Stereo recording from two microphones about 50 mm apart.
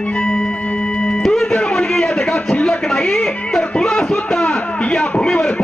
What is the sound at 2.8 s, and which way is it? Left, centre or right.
Speech, centre.